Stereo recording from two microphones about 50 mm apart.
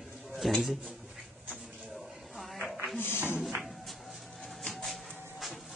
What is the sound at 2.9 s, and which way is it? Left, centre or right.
Speech, left.